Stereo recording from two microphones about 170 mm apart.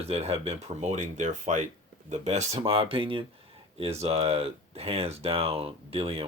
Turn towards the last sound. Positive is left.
turn(degrees=-35)  # may be behind; listen again after turning